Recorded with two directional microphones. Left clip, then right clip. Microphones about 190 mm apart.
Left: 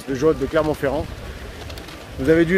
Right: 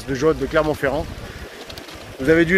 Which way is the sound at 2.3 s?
15° left (ahead or behind).